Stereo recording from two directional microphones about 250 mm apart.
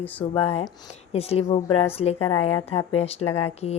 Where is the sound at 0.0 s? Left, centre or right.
Centre.